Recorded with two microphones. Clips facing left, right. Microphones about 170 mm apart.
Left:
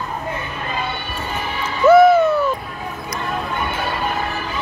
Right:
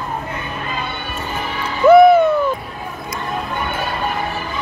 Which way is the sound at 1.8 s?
15° right (ahead or behind).